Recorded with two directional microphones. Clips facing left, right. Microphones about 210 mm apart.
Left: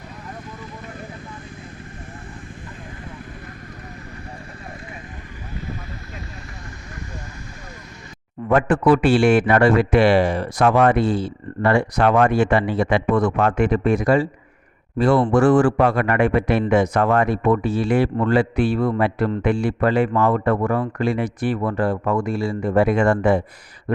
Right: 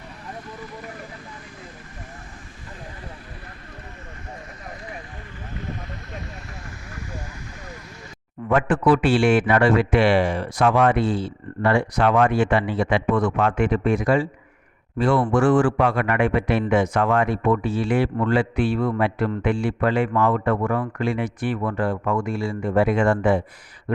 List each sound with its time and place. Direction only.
8.4 s a man's voice: 40° left (ahead or behind)